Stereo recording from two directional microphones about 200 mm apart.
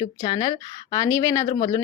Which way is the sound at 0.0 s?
20° left (ahead or behind).